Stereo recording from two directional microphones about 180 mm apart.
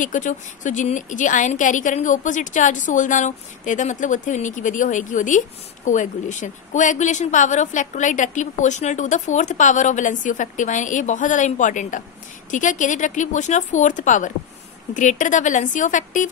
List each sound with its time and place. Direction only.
0.0 s a woman's voice: 45° left (ahead or behind)